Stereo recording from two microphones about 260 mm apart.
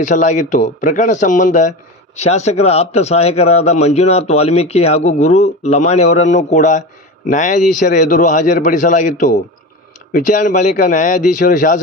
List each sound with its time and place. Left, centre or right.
0.0 s a man's voice: left